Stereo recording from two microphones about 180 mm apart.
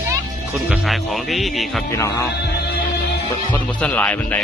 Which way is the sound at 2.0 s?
15° left (ahead or behind).